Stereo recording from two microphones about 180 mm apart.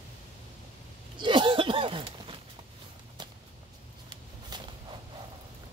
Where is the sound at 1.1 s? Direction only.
25° right (ahead or behind).